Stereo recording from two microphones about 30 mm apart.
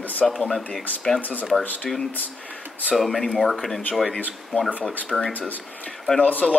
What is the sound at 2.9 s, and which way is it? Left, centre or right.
Speech, centre.